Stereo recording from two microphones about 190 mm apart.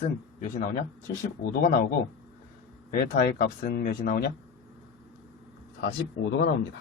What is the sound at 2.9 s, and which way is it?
Speech, 50° left (ahead or behind).